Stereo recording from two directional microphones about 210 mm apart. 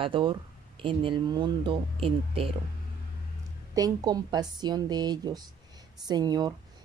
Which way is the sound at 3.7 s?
20° right (ahead or behind).